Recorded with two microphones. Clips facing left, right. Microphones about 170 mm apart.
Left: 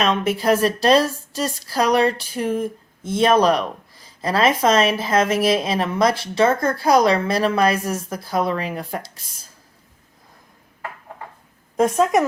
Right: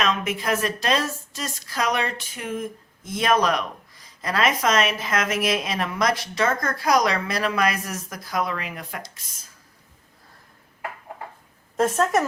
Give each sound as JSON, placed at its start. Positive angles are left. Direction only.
{"t": 0.0, "sound": "a woman's voice", "side_deg": 30}
{"t": 11.8, "sound": "a woman's voice", "side_deg": 15}